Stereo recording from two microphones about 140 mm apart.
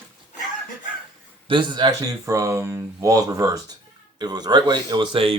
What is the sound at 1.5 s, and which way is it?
Speech, 35° right (ahead or behind).